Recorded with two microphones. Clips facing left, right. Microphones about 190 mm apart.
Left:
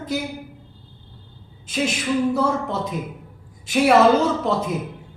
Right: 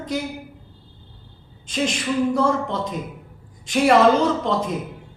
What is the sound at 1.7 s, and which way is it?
A woman's voice, 5° left (ahead or behind).